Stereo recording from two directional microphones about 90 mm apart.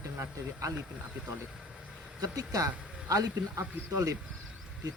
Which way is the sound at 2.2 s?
40° right (ahead or behind).